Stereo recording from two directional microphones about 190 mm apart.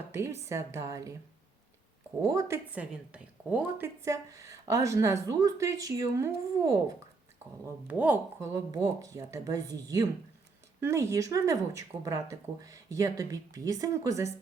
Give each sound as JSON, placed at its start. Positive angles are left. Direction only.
{"t": 0.1, "sound": "a woman's voice", "side_deg": -15}
{"t": 2.3, "sound": "a woman's voice", "side_deg": -15}
{"t": 7.9, "sound": "a woman's voice", "side_deg": -10}